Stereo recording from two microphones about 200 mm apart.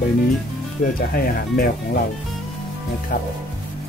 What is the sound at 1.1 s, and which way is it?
Speech, 50° left (ahead or behind).